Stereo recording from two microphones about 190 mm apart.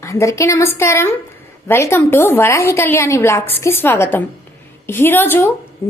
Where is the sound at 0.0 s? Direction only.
15° left (ahead or behind).